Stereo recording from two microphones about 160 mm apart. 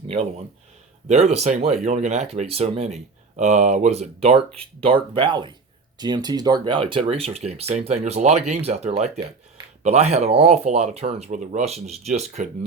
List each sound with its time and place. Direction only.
1.0 s speech: 45° right (ahead or behind)